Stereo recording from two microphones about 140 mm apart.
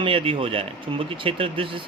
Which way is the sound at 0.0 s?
40° right (ahead or behind).